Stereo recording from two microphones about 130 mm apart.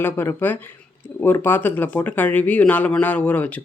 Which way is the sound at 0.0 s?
20° left (ahead or behind).